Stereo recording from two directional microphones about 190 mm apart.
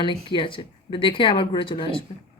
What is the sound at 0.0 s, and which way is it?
Speech, 25° left (ahead or behind).